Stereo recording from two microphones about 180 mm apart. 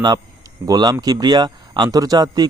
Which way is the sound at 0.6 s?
20° right (ahead or behind).